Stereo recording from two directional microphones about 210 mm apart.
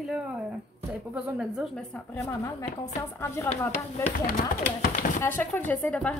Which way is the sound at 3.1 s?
10° left (ahead or behind).